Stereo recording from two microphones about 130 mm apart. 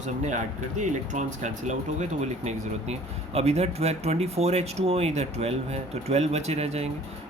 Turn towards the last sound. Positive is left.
turn(degrees=-55)  # may be behind; listen again after turning